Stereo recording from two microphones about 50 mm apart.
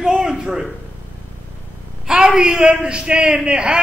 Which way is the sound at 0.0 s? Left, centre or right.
Centre.